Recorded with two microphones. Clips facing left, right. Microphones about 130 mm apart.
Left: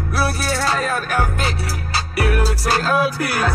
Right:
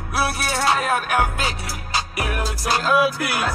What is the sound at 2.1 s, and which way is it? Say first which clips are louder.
Music: left 6 dB; 40° left (ahead or behind).